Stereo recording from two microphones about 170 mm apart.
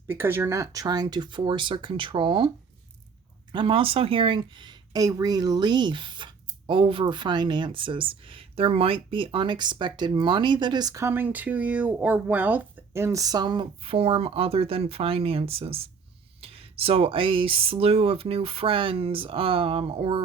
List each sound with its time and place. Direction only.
0.1 s speech: 10° right (ahead or behind); by 2.5 s 30° right (ahead or behind)
3.5 s speech: 30° right (ahead or behind)